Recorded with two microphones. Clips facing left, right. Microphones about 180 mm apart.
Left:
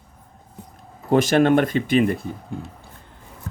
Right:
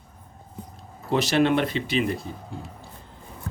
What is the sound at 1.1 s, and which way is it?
Speech, 50° left (ahead or behind).